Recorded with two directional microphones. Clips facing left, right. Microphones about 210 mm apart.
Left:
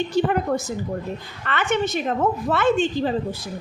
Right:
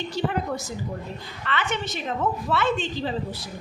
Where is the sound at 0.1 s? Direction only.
50° left (ahead or behind).